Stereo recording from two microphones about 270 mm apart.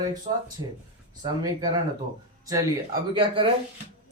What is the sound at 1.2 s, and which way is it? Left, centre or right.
Speech, centre.